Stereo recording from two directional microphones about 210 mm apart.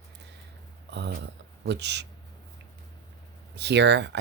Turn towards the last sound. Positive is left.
turn(degrees=-55)  # may be behind; listen again after turning